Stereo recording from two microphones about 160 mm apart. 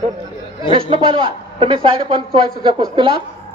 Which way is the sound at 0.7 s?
35° right (ahead or behind).